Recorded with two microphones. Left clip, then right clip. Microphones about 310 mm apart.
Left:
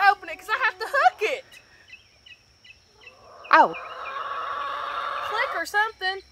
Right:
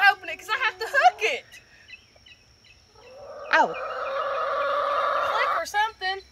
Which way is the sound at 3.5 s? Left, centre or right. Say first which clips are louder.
Left 4 dB; centre.